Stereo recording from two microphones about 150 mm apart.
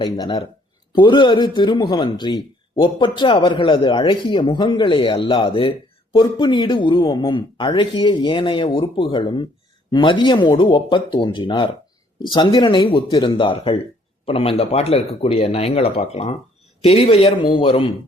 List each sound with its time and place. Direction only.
0.0 s speech: 30° left (ahead or behind)